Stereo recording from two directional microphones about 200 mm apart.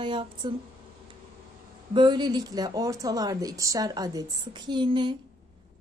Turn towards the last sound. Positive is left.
turn(degrees=-25)  # may be behind; listen again after turning